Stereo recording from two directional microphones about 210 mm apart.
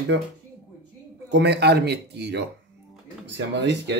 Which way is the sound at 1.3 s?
50° right (ahead or behind).